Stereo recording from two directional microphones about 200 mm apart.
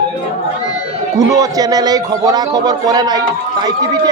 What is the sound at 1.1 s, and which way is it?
Speech, 20° right (ahead or behind).